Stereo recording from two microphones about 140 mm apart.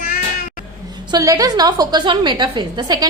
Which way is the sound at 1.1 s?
25° right (ahead or behind).